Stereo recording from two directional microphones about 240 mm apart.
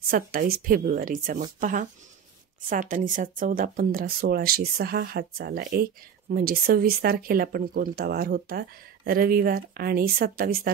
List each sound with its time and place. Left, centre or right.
0.1 s speech: right